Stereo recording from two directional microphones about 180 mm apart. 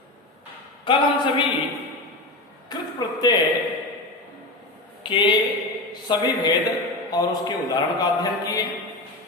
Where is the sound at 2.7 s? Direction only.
20° left (ahead or behind).